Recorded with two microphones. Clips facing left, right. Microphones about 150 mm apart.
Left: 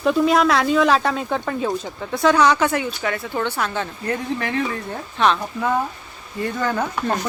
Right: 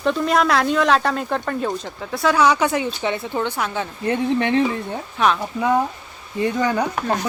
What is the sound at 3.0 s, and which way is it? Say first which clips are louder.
Speech: right 1 dB; 20° right (ahead or behind).